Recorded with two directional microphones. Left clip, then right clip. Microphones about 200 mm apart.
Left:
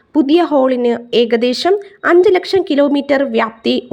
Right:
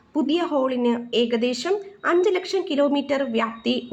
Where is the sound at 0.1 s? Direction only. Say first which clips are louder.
Left 11 dB; 40° left (ahead or behind).